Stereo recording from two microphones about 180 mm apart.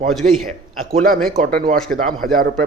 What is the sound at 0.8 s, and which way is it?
Speech, 50° right (ahead or behind).